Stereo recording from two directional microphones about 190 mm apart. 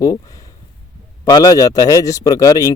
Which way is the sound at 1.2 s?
20° left (ahead or behind).